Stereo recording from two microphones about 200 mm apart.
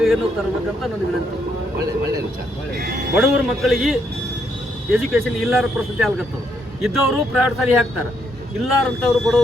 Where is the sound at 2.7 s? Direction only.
50° right (ahead or behind).